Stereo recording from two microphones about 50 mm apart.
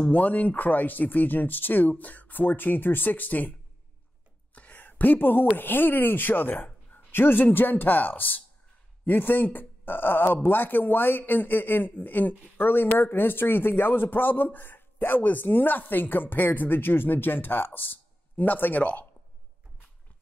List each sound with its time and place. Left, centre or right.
0.1 s a man's voice: left
4.6 s speech: left
7.5 s a man's voice: left